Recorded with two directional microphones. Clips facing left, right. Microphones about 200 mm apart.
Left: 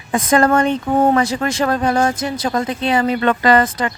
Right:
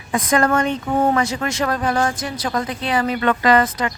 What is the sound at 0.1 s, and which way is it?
Speech, 30° left (ahead or behind).